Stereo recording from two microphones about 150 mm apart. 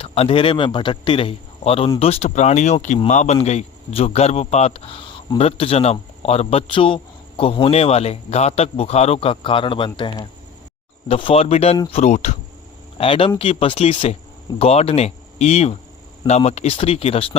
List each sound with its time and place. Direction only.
0.0 s a man's voice: 40° left (ahead or behind)
13.0 s a man's voice: 35° left (ahead or behind)